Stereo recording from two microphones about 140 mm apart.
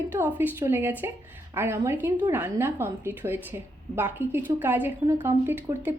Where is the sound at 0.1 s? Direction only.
15° right (ahead or behind).